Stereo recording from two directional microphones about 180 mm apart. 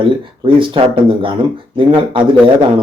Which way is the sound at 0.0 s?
25° right (ahead or behind).